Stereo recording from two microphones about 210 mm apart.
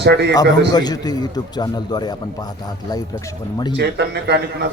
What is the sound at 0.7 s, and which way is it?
A man's voice, 20° left (ahead or behind).